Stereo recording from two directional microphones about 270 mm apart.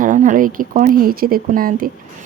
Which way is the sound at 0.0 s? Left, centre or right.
Right.